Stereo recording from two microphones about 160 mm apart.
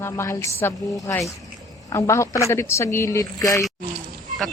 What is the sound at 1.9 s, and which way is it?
A woman's voice, 20° left (ahead or behind).